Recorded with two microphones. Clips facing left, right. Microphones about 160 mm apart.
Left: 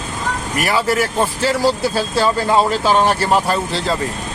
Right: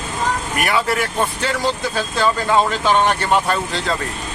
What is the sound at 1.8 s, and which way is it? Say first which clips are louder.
Speech: left 4 dB; 35° left (ahead or behind).